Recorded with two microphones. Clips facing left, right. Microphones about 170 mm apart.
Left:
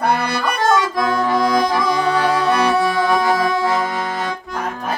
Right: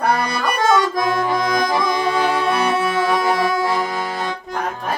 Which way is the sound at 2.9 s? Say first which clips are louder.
Left 1 dB; 25° right (ahead or behind).